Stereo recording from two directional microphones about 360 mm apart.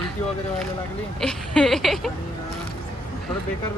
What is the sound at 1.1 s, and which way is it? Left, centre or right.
Speech, centre.